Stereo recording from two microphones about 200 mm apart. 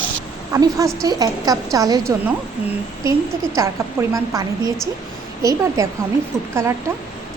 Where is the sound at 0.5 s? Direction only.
15° right (ahead or behind).